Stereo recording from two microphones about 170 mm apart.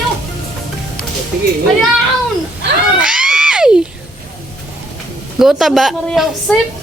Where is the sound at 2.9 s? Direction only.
5° right (ahead or behind).